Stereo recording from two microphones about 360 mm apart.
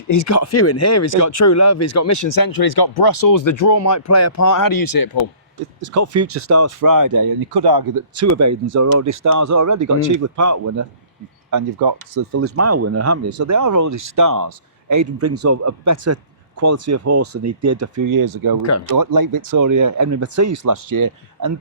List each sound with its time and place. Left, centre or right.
0.1 s speech: left
5.9 s speech: right
8.4 s speech: right
11.5 s speech: right
12.3 s speech: right